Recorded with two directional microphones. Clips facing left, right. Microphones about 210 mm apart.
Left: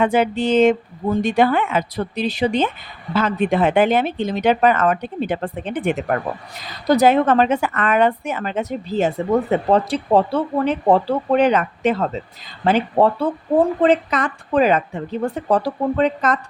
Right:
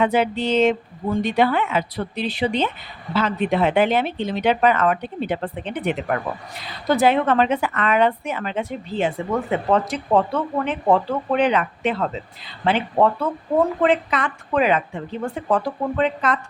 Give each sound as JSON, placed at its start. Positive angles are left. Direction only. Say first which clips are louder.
{"t": 0.0, "sound": "a woman's voice", "louder": "left 2 dB", "side_deg": 50}